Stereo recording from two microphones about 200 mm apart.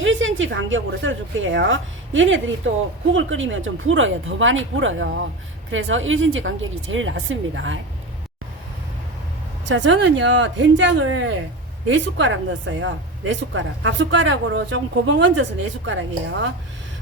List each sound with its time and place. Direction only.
0.0 s a woman's voice: 75° right (ahead or behind)
5.7 s a woman's voice: 75° right (ahead or behind)
9.6 s a woman's voice: 65° right (ahead or behind)